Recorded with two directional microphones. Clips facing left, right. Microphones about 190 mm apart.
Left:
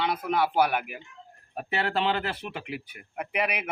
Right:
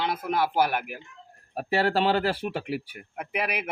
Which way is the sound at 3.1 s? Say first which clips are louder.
Left 1 dB; centre (ahead or behind).